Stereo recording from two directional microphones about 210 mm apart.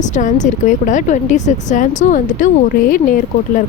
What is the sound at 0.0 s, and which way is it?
Speech, 35° left (ahead or behind).